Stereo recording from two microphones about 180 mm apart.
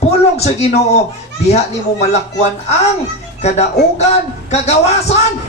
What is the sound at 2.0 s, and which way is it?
Speech, 40° left (ahead or behind).